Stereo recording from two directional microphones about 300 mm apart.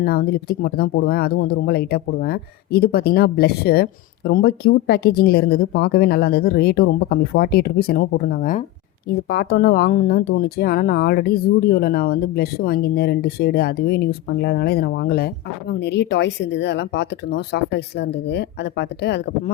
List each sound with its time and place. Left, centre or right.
0.0 s speech: left